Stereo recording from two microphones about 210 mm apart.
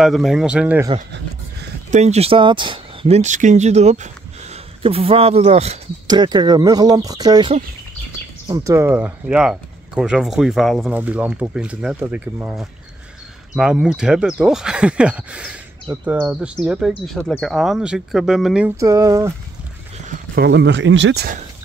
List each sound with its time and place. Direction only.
0.0 s speech: centre (ahead or behind)
1.9 s speech: 30° right (ahead or behind)
6.0 s speech: 20° right (ahead or behind); by 18.7 s 5° right (ahead or behind)
18.8 s speech: 15° right (ahead or behind)
20.4 s speech: 55° right (ahead or behind)